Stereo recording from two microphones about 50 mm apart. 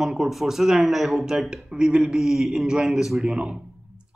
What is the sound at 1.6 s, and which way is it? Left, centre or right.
Speech, centre.